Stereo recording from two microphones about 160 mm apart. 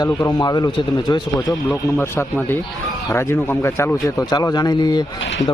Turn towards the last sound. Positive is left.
turn(degrees=25)  # may be behind; listen again after turning